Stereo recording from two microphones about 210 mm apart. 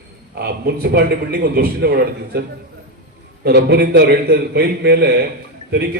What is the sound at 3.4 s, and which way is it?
A man's voice, 50° right (ahead or behind).